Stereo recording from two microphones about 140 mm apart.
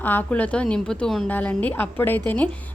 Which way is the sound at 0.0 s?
15° left (ahead or behind).